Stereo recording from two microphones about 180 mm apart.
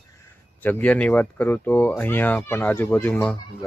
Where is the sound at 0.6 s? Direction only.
10° left (ahead or behind).